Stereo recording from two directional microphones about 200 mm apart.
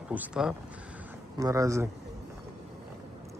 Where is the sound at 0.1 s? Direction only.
5° right (ahead or behind).